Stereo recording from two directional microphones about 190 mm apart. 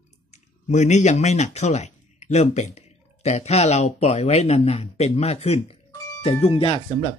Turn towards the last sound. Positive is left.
turn(degrees=30)  # may be behind; listen again after turning